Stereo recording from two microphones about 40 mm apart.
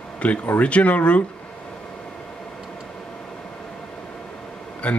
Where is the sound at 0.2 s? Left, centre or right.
Left.